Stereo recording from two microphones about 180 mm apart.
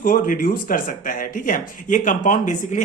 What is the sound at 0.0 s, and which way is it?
Speech, 50° left (ahead or behind).